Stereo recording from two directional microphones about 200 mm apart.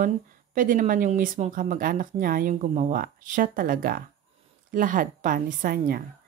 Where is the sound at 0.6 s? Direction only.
40° right (ahead or behind).